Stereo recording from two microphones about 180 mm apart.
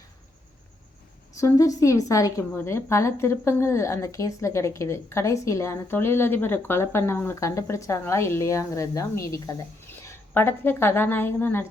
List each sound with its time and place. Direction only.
1.4 s speech: 15° left (ahead or behind)